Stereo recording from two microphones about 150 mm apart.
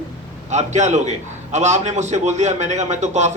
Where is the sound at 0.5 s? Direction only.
50° right (ahead or behind).